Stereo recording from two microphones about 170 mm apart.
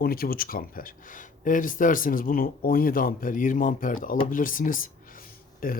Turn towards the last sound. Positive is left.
turn(degrees=55)  # may be behind; listen again after turning